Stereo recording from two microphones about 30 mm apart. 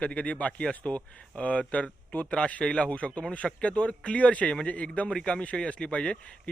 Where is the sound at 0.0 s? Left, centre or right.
Left.